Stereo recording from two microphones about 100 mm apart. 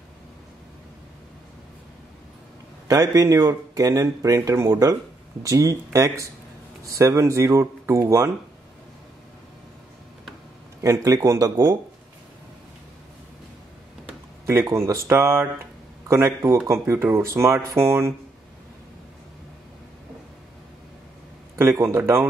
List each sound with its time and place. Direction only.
2.9 s speech: 35° right (ahead or behind)
10.8 s speech: 35° right (ahead or behind)
14.4 s speech: 25° right (ahead or behind)
21.5 s speech: 25° right (ahead or behind)